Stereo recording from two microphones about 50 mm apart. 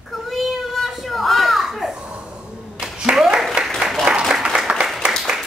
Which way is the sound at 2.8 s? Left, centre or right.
Centre.